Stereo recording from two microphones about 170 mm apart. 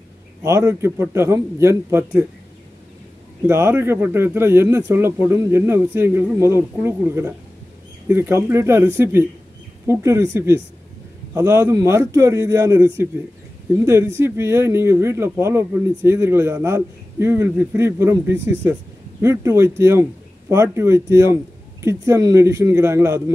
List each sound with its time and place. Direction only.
0.4 s speech: 15° right (ahead or behind)
3.4 s speech: 15° right (ahead or behind)